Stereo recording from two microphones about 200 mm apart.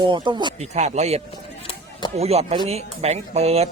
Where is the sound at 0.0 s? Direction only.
20° right (ahead or behind).